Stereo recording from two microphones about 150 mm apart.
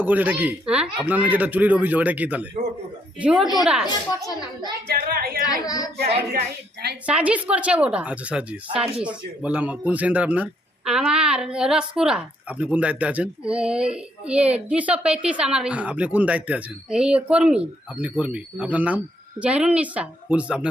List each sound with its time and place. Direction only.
0.0 s a woman's voice: 10° right (ahead or behind)
3.8 s a child's voice: 30° left (ahead or behind)
4.9 s speech: 90° right
5.6 s a child's voice: 25° left (ahead or behind)
7.1 s speech: 10° right (ahead or behind)